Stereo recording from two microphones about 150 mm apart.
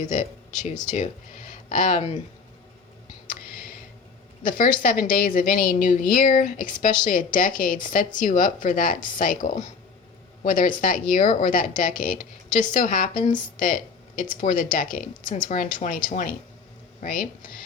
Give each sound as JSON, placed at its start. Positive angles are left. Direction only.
{"t": 0.0, "sound": "speech", "side_deg": 55}
{"t": 3.2, "sound": "a sound", "side_deg": 70}
{"t": 4.4, "sound": "a woman's voice", "side_deg": 70}